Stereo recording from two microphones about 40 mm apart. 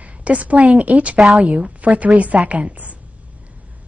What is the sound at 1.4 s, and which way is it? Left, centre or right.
A woman's voice, right.